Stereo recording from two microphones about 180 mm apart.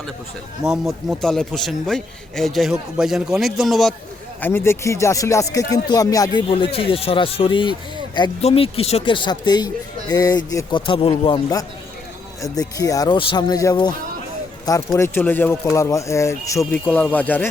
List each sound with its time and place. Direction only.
0.6 s a man's voice: centre (ahead or behind)
4.4 s speech: 10° left (ahead or behind)
6.5 s speech: 30° left (ahead or behind)
14.9 s speech: 15° left (ahead or behind)